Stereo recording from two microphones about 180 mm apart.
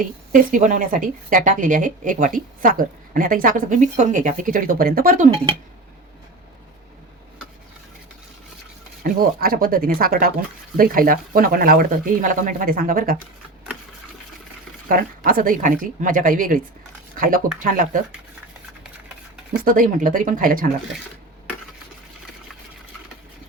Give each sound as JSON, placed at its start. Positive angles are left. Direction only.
{"t": 0.5, "sound": "a woman's voice", "side_deg": -45}
{"t": 9.0, "sound": "a woman's voice", "side_deg": -55}
{"t": 14.8, "sound": "a woman's voice", "side_deg": -50}
{"t": 19.6, "sound": "a woman's voice", "side_deg": -50}